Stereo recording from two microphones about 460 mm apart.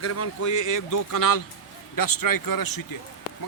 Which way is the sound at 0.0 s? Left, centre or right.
Left.